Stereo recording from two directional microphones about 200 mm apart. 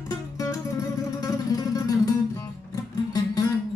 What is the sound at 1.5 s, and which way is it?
Music, 15° left (ahead or behind).